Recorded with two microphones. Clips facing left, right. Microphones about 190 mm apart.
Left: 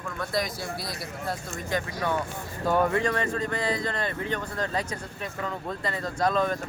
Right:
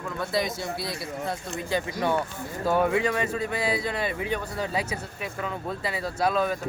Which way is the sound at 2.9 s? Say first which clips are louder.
Right 1 dB; 10° right (ahead or behind).